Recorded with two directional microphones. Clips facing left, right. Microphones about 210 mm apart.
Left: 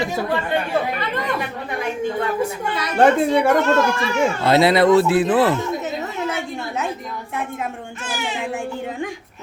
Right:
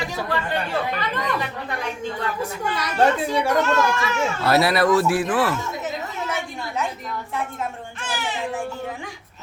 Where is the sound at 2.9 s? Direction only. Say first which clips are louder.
Left 5 dB; 50° left (ahead or behind).